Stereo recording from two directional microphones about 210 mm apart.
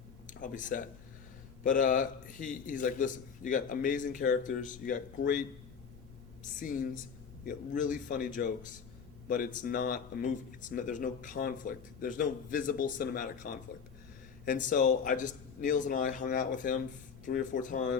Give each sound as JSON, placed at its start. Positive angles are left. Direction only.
{"t": 0.3, "sound": "speech", "side_deg": 40}